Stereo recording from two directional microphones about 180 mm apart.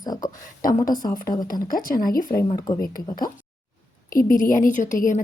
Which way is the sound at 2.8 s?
50° left (ahead or behind).